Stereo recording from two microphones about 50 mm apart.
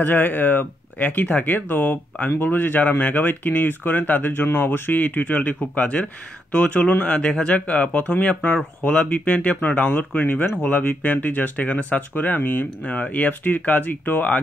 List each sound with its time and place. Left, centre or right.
0.0 s speech: left
7.2 s a man's voice: centre
7.5 s speech: left
12.8 s speech: left